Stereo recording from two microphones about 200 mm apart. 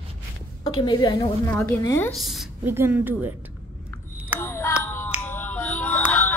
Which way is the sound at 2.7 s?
10° right (ahead or behind).